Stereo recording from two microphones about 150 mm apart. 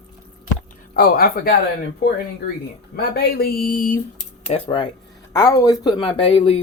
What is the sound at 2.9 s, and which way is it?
Speech, 90° left.